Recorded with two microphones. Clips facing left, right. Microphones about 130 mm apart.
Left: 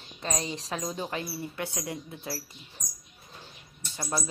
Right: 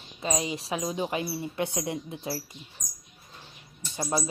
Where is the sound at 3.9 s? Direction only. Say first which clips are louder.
Right 4 dB; 20° right (ahead or behind).